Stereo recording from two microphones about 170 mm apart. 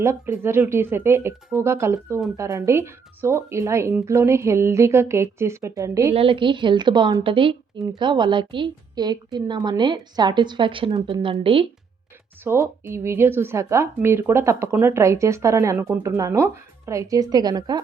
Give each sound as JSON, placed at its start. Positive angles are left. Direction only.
{"t": 0.0, "sound": "speech", "side_deg": -15}
{"t": 6.1, "sound": "a woman's voice", "side_deg": -30}
{"t": 12.5, "sound": "speech", "side_deg": -15}